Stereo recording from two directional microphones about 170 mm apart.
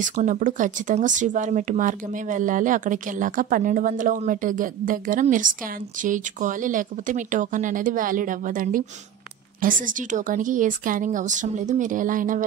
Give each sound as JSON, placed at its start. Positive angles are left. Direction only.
{"t": 0.0, "sound": "speech", "side_deg": -50}